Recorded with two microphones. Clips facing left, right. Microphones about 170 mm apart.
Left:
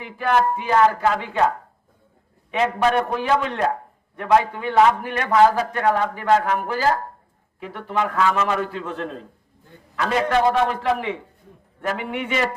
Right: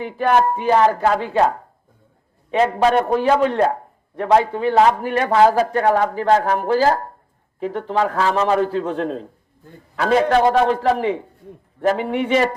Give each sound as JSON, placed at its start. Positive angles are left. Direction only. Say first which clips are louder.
{"t": 0.0, "sound": "a man's voice", "louder": "right 3 dB", "side_deg": -40}